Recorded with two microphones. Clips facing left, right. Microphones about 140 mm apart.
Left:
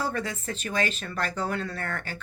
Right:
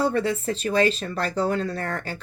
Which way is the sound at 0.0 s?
30° right (ahead or behind).